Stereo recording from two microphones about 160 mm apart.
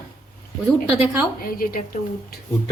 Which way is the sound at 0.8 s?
15° right (ahead or behind).